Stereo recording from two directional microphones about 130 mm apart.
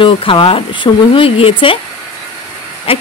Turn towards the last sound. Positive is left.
turn(degrees=45)  # may be behind; listen again after turning